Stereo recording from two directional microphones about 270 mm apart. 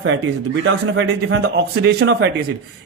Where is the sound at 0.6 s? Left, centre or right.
Right.